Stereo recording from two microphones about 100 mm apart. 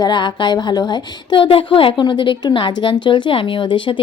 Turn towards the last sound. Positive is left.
turn(degrees=55)  # may be behind; listen again after turning